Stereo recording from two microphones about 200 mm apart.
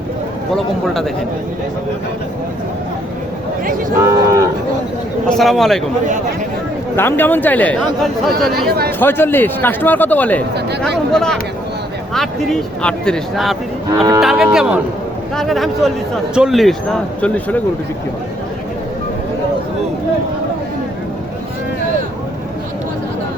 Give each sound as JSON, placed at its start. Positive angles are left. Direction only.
{"t": 0.5, "sound": "speech", "side_deg": 0}
{"t": 3.9, "sound": "speech", "side_deg": -15}
{"t": 5.3, "sound": "speech", "side_deg": 0}
{"t": 6.9, "sound": "speech", "side_deg": 10}